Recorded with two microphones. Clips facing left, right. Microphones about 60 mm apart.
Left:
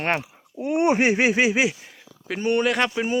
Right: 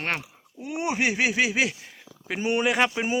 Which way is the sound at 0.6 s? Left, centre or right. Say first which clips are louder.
Left 7 dB; left.